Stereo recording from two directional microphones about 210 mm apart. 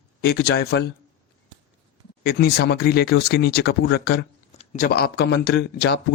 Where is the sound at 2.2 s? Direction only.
50° left (ahead or behind).